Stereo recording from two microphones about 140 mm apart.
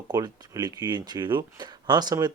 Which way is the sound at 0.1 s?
30° right (ahead or behind).